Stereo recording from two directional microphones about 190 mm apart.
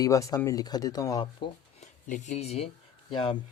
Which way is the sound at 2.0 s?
40° left (ahead or behind).